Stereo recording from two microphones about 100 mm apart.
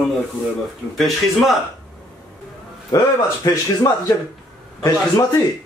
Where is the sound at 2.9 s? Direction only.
40° left (ahead or behind).